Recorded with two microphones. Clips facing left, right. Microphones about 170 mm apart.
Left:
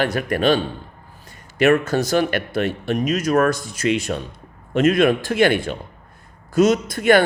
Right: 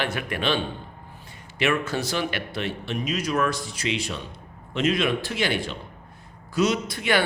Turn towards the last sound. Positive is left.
turn(degrees=50)  # may be behind; listen again after turning